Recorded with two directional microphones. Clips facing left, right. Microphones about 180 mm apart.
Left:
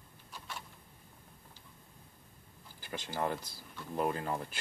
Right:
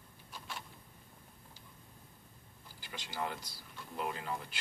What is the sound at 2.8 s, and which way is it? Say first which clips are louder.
Speech: left 5 dB; 50° left (ahead or behind).